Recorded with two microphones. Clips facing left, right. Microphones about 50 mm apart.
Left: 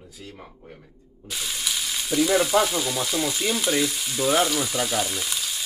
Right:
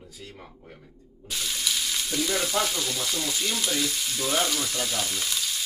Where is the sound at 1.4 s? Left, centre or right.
Centre.